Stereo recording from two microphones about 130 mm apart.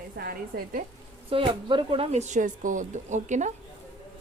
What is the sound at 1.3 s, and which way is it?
Speech, 40° right (ahead or behind).